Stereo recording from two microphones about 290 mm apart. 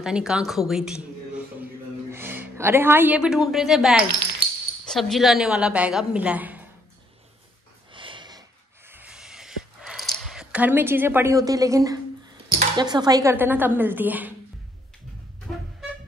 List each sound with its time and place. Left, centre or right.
0.0 s a man's voice: centre
7.9 s sniff: centre
8.9 s a sound: centre
12.5 s speech: centre